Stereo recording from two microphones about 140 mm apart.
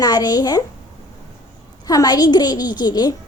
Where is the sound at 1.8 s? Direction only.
25° left (ahead or behind).